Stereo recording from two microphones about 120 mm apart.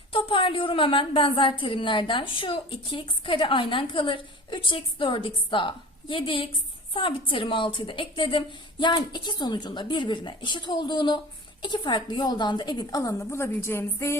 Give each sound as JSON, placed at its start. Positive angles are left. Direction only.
{"t": 0.1, "sound": "a woman's voice", "side_deg": 45}